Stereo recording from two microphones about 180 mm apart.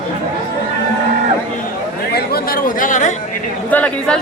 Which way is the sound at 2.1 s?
55° left (ahead or behind).